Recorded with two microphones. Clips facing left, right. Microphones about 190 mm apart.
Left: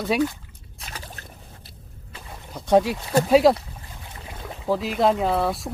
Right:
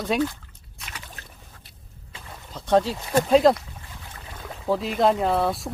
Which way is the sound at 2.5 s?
10° left (ahead or behind).